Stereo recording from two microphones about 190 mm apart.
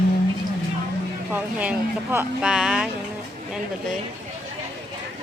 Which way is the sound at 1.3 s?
10° right (ahead or behind).